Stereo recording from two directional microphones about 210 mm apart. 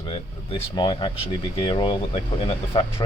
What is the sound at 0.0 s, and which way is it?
Air conditioning, 25° left (ahead or behind).